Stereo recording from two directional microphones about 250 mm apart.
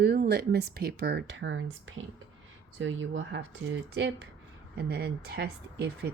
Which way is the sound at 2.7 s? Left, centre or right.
Right.